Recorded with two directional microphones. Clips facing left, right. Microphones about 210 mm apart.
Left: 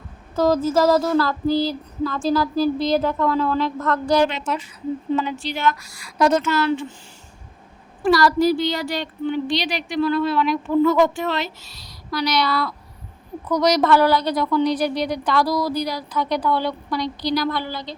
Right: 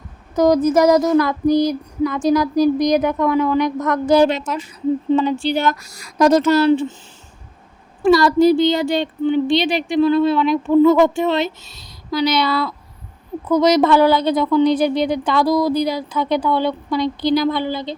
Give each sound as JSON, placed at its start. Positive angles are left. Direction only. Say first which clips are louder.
{"t": 0.3, "sound": "female singing", "louder": "right 4 dB", "side_deg": -20}
{"t": 4.3, "sound": "speech", "louder": "right 4 dB", "side_deg": -40}
{"t": 5.1, "sound": "a woman's voice", "louder": "right 5 dB", "side_deg": -30}
{"t": 5.5, "sound": "speech", "louder": "right 3 dB", "side_deg": -40}
{"t": 8.0, "sound": "a woman's voice", "louder": "right 5 dB", "side_deg": -25}